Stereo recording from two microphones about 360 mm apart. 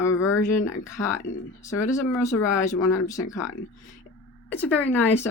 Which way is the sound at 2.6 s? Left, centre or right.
Centre.